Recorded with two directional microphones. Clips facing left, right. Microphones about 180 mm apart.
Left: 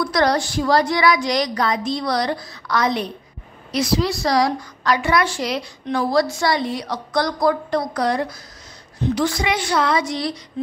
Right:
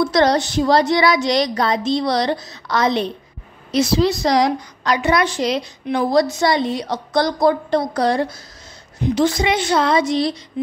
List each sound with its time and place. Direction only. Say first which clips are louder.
0.0 s a woman's voice: right 3 dB; 25° right (ahead or behind)